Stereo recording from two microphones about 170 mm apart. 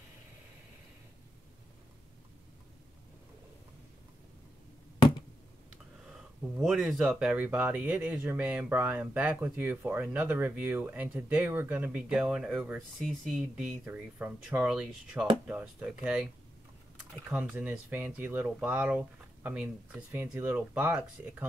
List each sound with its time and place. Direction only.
6.6 s speech: centre (ahead or behind)
17.3 s speech: 10° right (ahead or behind)